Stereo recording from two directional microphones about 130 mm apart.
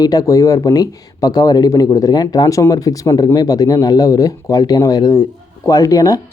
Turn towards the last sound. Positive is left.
turn(degrees=25)  # may be behind; listen again after turning